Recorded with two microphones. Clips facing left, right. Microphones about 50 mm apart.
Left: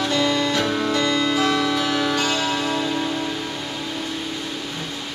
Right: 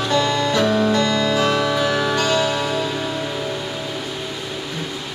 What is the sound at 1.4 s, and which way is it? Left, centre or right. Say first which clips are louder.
Music: right 2 dB; centre.